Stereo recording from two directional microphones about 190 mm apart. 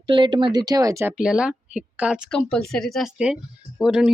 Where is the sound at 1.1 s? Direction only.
5° right (ahead or behind).